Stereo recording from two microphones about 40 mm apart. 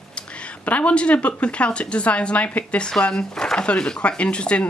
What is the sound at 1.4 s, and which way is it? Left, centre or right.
Speech, left.